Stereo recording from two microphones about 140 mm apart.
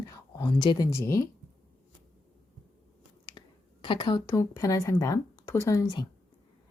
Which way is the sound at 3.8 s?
35° left (ahead or behind).